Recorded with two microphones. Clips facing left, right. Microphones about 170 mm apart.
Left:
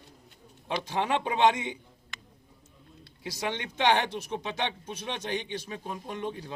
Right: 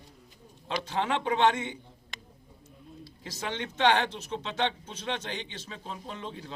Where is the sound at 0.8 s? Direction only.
15° left (ahead or behind).